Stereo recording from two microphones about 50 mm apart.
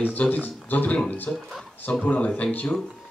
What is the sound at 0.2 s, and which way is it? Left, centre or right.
Speech, left.